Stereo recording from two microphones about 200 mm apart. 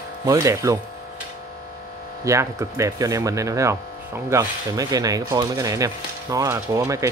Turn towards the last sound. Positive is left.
turn(degrees=-15)  # may be behind; listen again after turning